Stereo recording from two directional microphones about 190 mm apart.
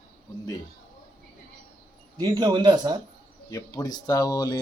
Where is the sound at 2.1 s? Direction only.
20° right (ahead or behind).